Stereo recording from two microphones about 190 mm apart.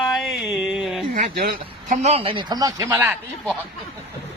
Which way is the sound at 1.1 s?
45° right (ahead or behind).